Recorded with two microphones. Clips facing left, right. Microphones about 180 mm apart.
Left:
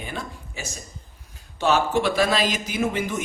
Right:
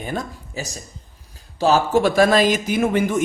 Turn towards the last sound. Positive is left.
turn(degrees=-55)  # may be behind; listen again after turning